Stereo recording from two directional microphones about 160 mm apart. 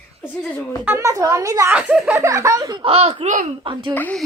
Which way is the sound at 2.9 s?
40° right (ahead or behind).